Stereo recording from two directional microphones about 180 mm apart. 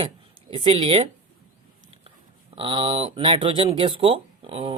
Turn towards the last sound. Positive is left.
turn(degrees=-30)  # may be behind; listen again after turning